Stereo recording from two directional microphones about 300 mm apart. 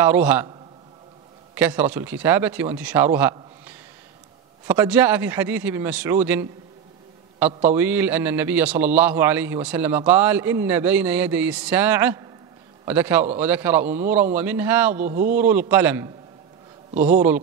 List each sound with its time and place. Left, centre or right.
0.0 s a man's voice: centre
15.0 s a man's voice: right
15.3 s a man's voice: centre
16.9 s a man's voice: right